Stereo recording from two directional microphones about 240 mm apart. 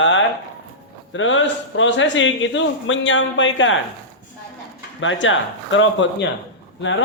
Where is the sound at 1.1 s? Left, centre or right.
Left.